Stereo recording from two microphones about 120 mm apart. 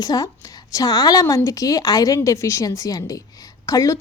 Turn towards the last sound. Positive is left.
turn(degrees=25)  # may be behind; listen again after turning